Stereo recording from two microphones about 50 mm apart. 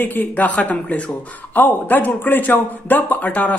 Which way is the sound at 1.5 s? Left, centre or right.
Left.